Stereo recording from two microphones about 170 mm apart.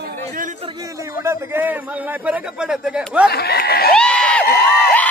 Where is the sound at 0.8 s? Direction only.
15° right (ahead or behind).